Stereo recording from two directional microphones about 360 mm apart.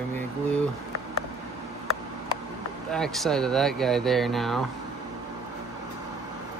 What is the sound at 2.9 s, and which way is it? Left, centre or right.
Speech, centre.